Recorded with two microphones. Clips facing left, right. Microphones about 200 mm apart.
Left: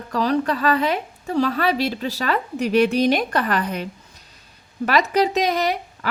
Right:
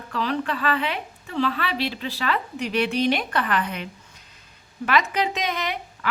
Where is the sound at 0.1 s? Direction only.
40° left (ahead or behind).